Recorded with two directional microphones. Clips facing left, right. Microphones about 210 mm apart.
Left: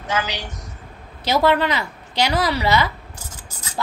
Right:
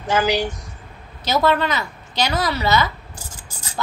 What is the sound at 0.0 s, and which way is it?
Speech, 30° right (ahead or behind).